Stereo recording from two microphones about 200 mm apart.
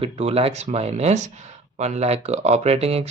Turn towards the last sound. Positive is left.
turn(degrees=-30)  # may be behind; listen again after turning